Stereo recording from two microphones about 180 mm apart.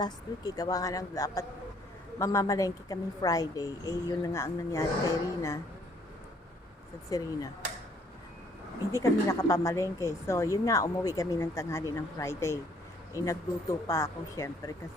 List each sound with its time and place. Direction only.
0.0 s a woman's voice: 20° left (ahead or behind)
7.1 s a woman's voice: 20° left (ahead or behind)
8.9 s speech: 15° left (ahead or behind)